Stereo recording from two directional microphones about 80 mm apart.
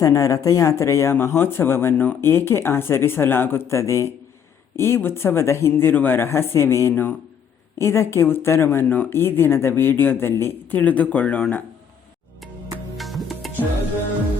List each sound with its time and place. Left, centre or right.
0.0 s speech: left; by 11.4 s centre
13.0 s music: centre